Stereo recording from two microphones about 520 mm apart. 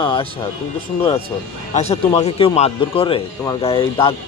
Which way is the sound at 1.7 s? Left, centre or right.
Centre.